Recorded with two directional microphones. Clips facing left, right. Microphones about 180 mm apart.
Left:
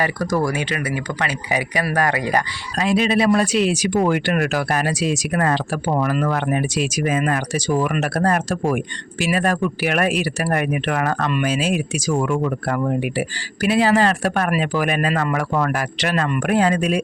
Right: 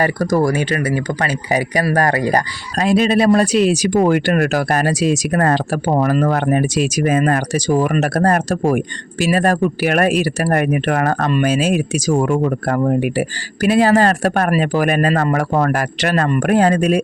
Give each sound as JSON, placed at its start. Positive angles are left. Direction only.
{"t": 0.0, "sound": "speech", "side_deg": -45}